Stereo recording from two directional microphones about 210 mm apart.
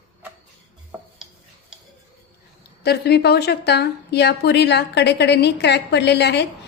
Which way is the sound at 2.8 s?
50° left (ahead or behind).